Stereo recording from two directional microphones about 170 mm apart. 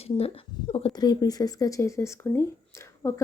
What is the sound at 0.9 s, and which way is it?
Speech, 25° left (ahead or behind).